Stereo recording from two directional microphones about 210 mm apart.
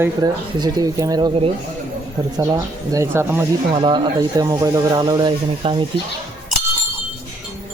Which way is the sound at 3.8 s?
20° right (ahead or behind).